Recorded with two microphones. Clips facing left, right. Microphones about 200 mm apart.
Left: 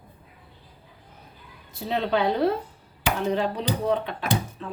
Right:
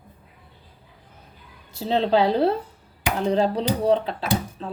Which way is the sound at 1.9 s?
30° right (ahead or behind).